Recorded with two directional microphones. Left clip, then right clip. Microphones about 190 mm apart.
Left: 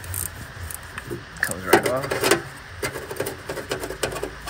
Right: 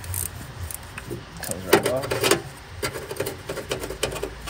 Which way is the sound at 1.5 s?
30° left (ahead or behind).